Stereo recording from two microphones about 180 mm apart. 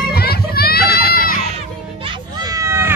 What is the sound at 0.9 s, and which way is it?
Crowd, 55° left (ahead or behind).